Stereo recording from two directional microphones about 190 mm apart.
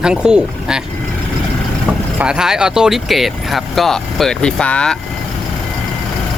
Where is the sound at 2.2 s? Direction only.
5° right (ahead or behind).